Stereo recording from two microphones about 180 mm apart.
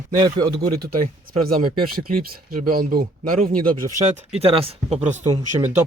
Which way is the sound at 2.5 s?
55° right (ahead or behind).